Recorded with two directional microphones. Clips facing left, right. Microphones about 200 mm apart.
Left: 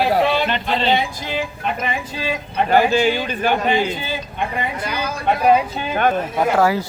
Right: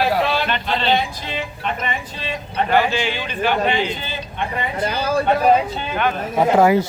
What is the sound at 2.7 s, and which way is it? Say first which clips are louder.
A man's voice: left 4 dB; 40° left (ahead or behind).